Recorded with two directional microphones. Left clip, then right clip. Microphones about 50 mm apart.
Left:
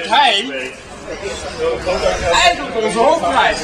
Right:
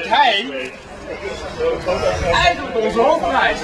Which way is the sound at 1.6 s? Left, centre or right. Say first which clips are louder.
Left 1 dB; centre.